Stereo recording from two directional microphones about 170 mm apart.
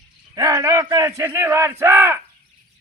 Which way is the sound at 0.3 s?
20° right (ahead or behind).